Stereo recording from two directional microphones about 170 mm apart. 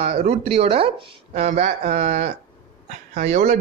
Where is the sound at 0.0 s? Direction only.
40° right (ahead or behind).